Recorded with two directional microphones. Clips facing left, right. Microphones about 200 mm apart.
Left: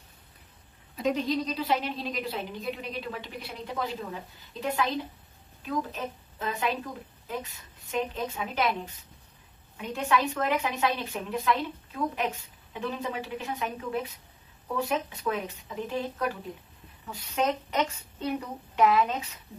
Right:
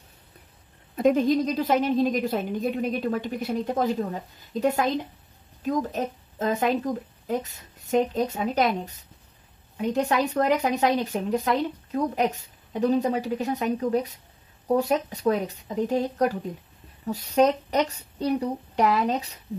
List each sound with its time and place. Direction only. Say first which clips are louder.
0.9 s a woman's voice: right 7 dB; 50° right (ahead or behind)